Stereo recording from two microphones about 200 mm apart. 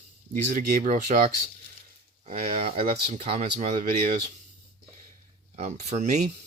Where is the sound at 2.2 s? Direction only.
30° right (ahead or behind).